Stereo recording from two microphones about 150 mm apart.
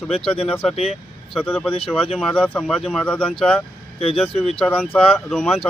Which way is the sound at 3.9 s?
40° left (ahead or behind).